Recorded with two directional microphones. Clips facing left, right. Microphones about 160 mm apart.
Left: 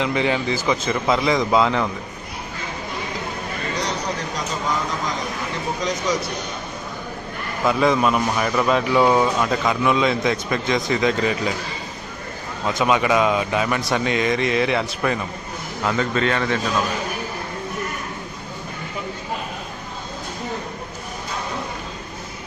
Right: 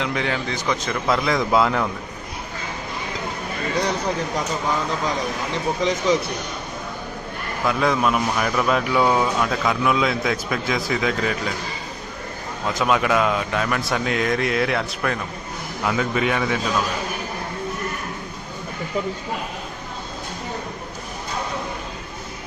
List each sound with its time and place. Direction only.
0.0 s a man's voice: centre (ahead or behind)
7.6 s a man's voice: centre (ahead or behind)
12.6 s a man's voice: centre (ahead or behind)